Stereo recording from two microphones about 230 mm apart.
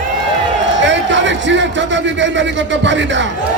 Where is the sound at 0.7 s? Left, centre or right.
Right.